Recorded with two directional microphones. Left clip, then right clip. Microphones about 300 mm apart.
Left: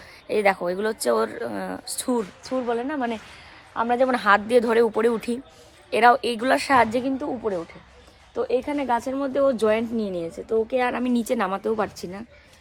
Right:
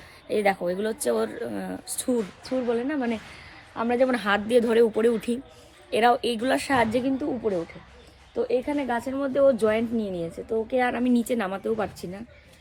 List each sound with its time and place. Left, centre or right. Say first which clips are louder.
0.3 s speech: left 3 dB; centre